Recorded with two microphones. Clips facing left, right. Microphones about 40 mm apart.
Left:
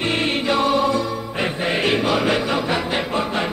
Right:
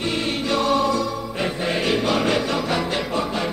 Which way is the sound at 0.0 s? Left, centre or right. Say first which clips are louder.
Left 3 dB; left.